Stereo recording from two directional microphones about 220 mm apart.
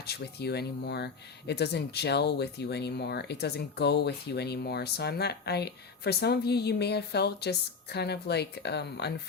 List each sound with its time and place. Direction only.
0.0 s speech: 45° left (ahead or behind)